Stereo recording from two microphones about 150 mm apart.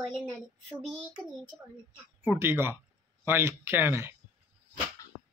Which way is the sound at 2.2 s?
15° right (ahead or behind).